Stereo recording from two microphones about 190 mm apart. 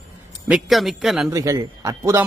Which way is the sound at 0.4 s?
5° right (ahead or behind).